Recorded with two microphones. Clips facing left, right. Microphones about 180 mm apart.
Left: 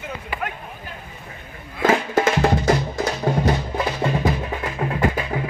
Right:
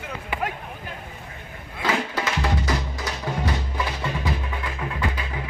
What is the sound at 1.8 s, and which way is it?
Music, 50° left (ahead or behind).